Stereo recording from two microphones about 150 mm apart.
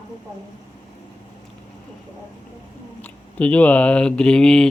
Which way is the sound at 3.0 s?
10° left (ahead or behind).